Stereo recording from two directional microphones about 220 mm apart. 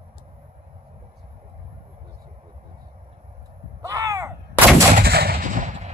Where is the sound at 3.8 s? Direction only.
15° right (ahead or behind).